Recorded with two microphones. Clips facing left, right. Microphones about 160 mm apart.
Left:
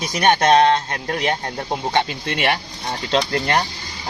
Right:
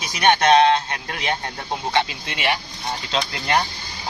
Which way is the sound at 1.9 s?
50° left (ahead or behind).